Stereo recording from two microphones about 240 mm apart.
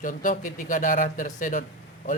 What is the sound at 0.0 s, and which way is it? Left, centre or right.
Speech, left.